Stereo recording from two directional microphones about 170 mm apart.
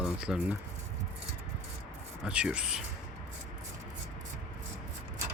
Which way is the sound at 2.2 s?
5° right (ahead or behind).